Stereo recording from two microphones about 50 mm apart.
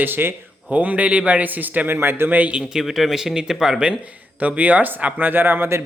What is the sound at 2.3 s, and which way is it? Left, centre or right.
Speech, right.